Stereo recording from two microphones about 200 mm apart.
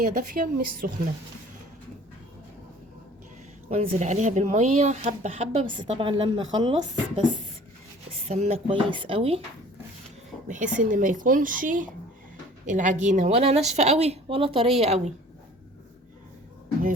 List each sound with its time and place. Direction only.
0.0 s a woman's voice: 45° right (ahead or behind)
3.7 s a woman's voice: 35° right (ahead or behind)
10.5 s a woman's voice: 40° right (ahead or behind)